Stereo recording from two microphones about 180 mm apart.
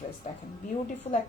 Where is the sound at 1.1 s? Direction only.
35° left (ahead or behind).